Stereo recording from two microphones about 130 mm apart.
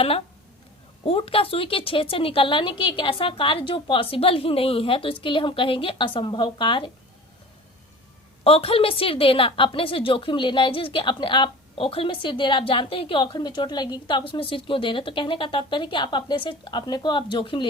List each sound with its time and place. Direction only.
1.0 s a woman's voice: 50° left (ahead or behind)
8.4 s a woman's voice: 45° left (ahead or behind)